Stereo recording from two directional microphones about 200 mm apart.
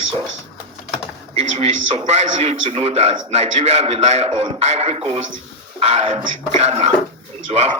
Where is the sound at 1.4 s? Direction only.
30° right (ahead or behind).